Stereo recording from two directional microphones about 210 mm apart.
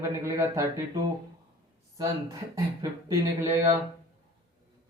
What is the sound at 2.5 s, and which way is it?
Speech, 15° right (ahead or behind).